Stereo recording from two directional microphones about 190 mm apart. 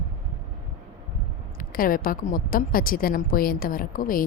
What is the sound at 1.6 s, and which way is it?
A woman's voice, 50° left (ahead or behind).